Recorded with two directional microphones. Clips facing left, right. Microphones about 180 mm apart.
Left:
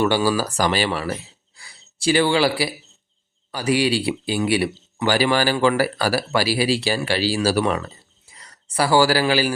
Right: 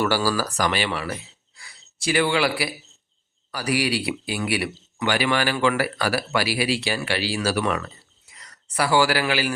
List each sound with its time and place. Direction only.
0.0 s speech: 20° left (ahead or behind)
1.5 s gasp: 30° left (ahead or behind)
3.5 s speech: 25° left (ahead or behind)